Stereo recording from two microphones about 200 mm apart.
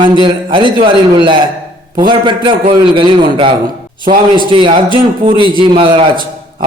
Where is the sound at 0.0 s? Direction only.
25° right (ahead or behind).